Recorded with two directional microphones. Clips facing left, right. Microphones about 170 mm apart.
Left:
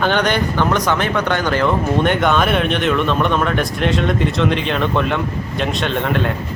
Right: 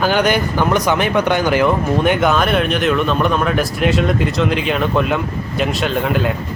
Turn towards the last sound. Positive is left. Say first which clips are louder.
# right 1 dB
turn(degrees=-5)  # may be behind; listen again after turning